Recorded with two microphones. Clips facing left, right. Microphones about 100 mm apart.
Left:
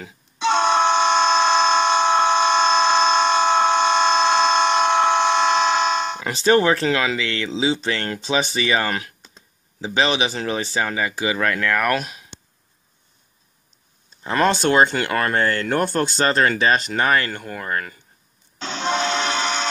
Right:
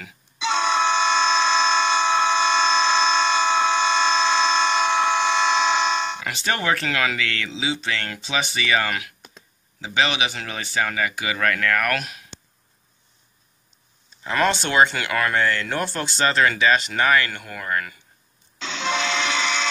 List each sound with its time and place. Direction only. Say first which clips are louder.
0.4 s vehicle horn: left 4 dB; 55° left (ahead or behind)
6.2 s speech: left 8 dB; 30° left (ahead or behind)
14.2 s speech: left 3 dB; 35° left (ahead or behind)
18.6 s music: left 3 dB; 45° left (ahead or behind)